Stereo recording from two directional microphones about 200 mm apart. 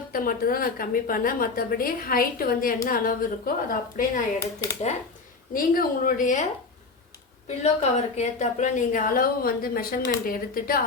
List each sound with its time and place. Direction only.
0.1 s a woman's voice: 45° left (ahead or behind)
5.5 s a woman's voice: 45° left (ahead or behind)